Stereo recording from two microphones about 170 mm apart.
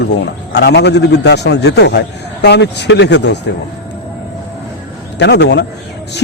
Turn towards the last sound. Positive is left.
turn(degrees=85)